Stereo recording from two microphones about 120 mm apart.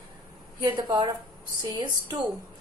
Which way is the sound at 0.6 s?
35° right (ahead or behind).